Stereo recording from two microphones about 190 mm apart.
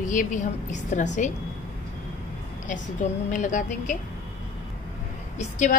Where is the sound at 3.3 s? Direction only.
40° left (ahead or behind).